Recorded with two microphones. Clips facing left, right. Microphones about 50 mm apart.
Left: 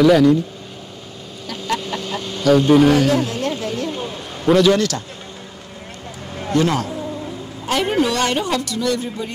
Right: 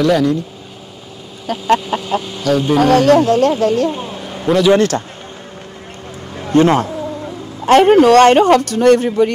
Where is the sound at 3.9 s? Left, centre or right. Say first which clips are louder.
Right 3 dB; centre.